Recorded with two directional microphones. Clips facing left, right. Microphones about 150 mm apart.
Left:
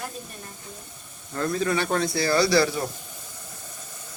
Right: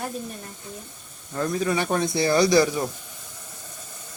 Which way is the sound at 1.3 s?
10° right (ahead or behind).